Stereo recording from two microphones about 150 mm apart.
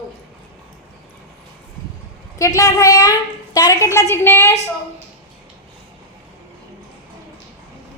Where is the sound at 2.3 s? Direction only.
20° left (ahead or behind).